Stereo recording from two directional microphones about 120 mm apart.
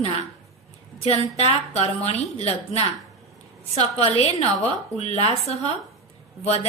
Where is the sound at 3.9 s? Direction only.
60° left (ahead or behind).